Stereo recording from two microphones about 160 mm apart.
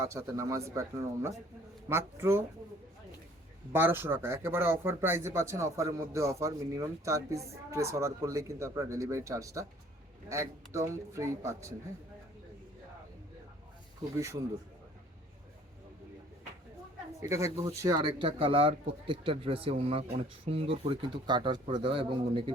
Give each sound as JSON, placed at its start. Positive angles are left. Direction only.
{"t": 0.0, "sound": "speech", "side_deg": -20}
{"t": 3.7, "sound": "speech", "side_deg": -15}
{"t": 17.2, "sound": "speech", "side_deg": -20}